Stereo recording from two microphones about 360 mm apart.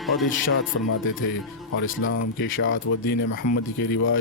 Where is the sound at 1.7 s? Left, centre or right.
Left.